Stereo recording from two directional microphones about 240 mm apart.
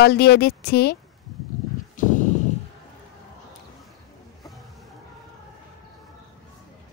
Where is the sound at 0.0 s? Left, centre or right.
Left.